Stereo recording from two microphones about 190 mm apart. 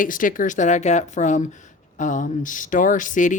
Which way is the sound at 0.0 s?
45° left (ahead or behind).